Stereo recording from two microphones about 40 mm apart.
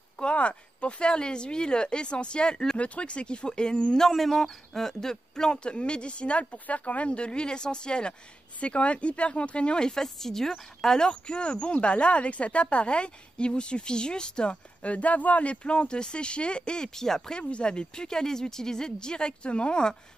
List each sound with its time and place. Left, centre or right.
0.2 s speech: left
2.8 s speech: left
4.1 s speech: centre
5.1 s speech: centre
14.8 s speech: left
15.5 s speech: left; by 17.4 s centre
17.4 s speech: left